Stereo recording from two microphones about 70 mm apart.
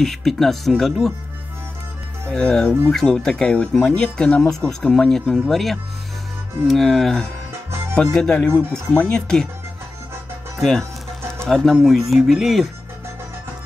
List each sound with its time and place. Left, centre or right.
0.0 s speech: centre
2.3 s speech: centre
10.6 s speech: centre